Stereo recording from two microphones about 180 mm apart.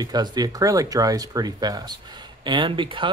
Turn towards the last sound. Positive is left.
turn(degrees=-25)  # may be behind; listen again after turning